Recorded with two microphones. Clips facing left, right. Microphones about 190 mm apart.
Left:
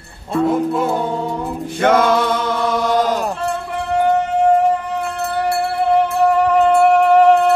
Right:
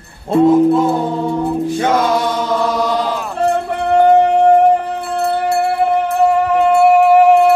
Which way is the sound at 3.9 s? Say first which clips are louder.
Right 6 dB; 60° right (ahead or behind).